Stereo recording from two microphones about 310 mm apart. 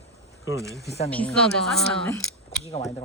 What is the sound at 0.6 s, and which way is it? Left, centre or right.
Speech, centre.